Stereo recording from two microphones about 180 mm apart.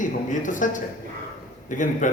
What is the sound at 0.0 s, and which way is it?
A man's voice, 45° left (ahead or behind).